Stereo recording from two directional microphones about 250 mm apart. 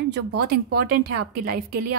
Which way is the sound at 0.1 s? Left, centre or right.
Right.